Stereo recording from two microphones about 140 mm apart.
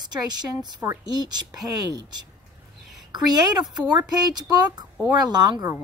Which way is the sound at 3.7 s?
30° right (ahead or behind).